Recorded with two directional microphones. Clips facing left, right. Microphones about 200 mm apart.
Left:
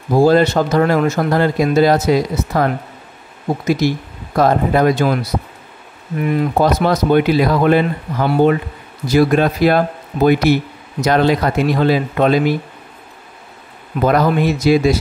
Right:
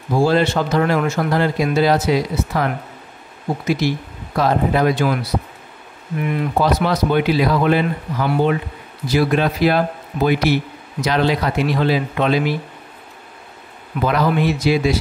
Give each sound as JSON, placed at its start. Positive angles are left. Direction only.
{"t": 0.1, "sound": "speech", "side_deg": 40}
{"t": 6.6, "sound": "speech", "side_deg": 45}
{"t": 14.0, "sound": "speech", "side_deg": 45}